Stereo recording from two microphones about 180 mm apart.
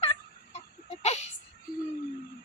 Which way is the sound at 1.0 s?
35° left (ahead or behind).